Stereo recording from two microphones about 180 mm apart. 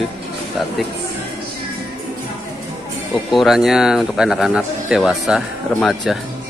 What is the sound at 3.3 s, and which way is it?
Speech, centre (ahead or behind).